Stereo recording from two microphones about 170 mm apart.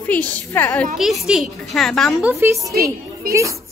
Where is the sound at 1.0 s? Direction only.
Centre (ahead or behind).